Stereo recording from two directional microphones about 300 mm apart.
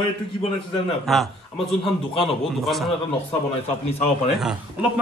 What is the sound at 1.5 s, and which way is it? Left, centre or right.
Speech, centre.